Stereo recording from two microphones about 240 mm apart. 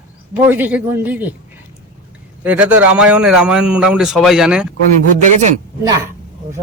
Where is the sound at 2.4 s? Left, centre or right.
Centre.